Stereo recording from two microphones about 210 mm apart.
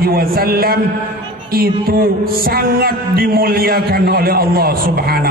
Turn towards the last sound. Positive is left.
turn(degrees=-45)  # may be behind; listen again after turning